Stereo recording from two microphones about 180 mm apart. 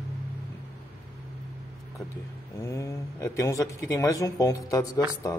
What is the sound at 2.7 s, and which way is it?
Speech, 15° left (ahead or behind).